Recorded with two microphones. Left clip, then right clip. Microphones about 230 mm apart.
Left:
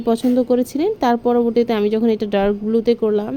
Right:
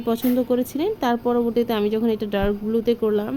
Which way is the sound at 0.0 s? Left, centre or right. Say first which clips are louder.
Left 5 dB; centre.